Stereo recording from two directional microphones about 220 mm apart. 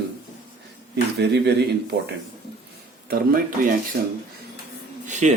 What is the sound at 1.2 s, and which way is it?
Speech, 50° right (ahead or behind).